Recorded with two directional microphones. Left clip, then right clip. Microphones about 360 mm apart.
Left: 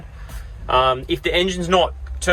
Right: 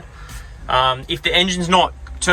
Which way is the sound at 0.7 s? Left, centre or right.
Centre.